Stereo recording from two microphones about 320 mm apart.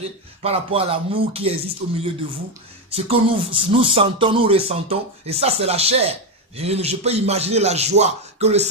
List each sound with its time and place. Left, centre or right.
0.4 s speech: centre
2.9 s speech: centre